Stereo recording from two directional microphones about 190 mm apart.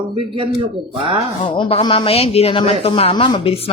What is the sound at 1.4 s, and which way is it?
Speech, 25° left (ahead or behind).